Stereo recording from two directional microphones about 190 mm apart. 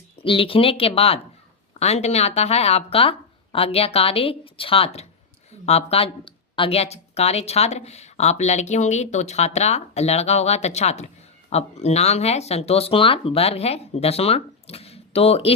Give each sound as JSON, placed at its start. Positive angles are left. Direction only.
{"t": 0.2, "sound": "speech", "side_deg": 30}